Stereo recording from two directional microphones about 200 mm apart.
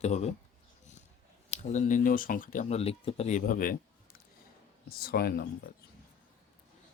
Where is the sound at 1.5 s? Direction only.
35° left (ahead or behind).